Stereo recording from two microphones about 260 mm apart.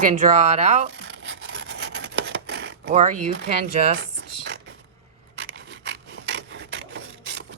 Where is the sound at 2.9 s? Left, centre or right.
Right.